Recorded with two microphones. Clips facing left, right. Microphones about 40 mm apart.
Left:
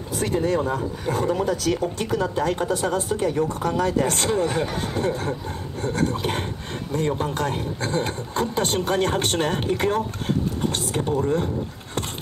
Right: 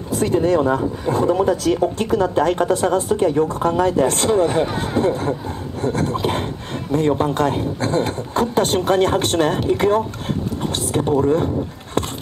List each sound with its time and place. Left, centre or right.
0.1 s speech: right